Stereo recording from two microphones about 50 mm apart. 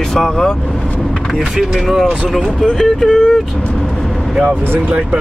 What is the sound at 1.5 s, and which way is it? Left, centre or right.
Speech, centre.